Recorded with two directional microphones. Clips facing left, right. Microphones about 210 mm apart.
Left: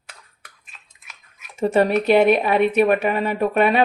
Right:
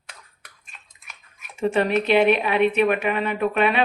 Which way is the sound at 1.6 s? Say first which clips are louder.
Left 3 dB; 40° left (ahead or behind).